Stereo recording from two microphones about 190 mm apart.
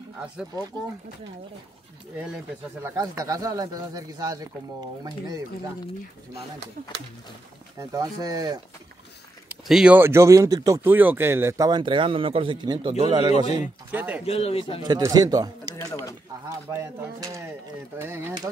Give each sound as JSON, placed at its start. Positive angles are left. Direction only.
{"t": 2.1, "sound": "speech", "side_deg": -5}
{"t": 3.0, "sound": "speech", "side_deg": -20}
{"t": 7.8, "sound": "speech", "side_deg": -20}
{"t": 9.5, "sound": "speech", "side_deg": -5}
{"t": 13.9, "sound": "speech", "side_deg": -10}
{"t": 14.2, "sound": "speech", "side_deg": 30}
{"t": 14.8, "sound": "speech", "side_deg": -20}
{"t": 15.9, "sound": "speech", "side_deg": 15}
{"t": 16.4, "sound": "speech", "side_deg": -15}